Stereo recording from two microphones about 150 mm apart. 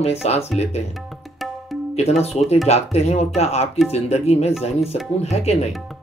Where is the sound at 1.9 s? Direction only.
45° left (ahead or behind).